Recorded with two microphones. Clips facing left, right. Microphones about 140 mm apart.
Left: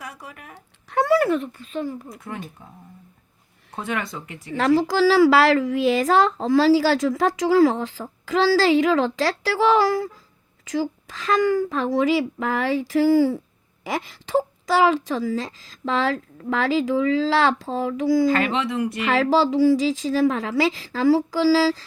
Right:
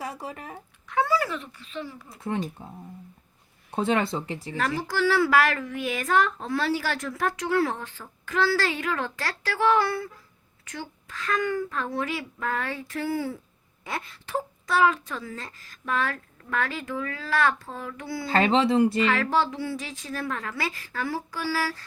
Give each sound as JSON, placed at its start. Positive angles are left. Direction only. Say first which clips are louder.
{"t": 0.0, "sound": "speech", "louder": "right 4 dB", "side_deg": -30}
{"t": 0.9, "sound": "speech", "louder": "left 7 dB", "side_deg": 70}
{"t": 2.0, "sound": "speech", "louder": "right 4 dB", "side_deg": -30}
{"t": 3.7, "sound": "speech", "louder": "right 4 dB", "side_deg": -25}
{"t": 4.5, "sound": "a woman's voice", "louder": "left 10 dB", "side_deg": 90}
{"t": 18.3, "sound": "speech", "louder": "even", "side_deg": -30}
{"t": 19.1, "sound": "a woman's voice", "louder": "left 7 dB", "side_deg": 90}